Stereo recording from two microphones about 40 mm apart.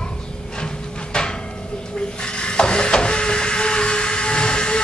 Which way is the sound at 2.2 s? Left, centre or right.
Left.